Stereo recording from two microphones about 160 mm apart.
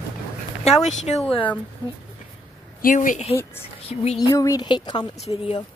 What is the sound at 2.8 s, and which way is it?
Speech, 55° left (ahead or behind).